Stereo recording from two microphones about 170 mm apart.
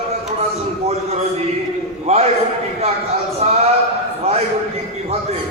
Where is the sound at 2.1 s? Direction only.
40° right (ahead or behind).